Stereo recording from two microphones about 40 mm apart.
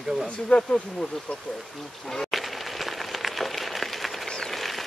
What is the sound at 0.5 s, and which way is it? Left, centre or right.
Speech, left.